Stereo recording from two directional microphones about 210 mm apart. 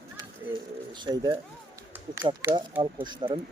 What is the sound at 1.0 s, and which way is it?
Speech, 20° right (ahead or behind).